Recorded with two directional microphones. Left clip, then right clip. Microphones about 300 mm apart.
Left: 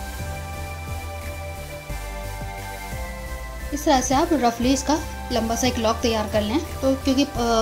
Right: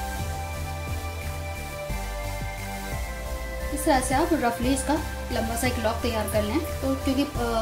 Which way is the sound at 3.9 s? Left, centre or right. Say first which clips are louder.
Left 3 dB; left.